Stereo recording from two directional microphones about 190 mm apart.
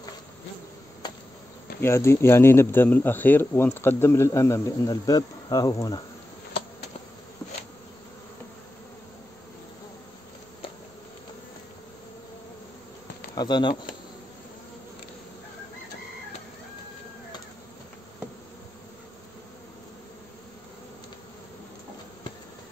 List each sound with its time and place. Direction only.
1.8 s speech: 15° left (ahead or behind)
13.3 s speech: 20° left (ahead or behind)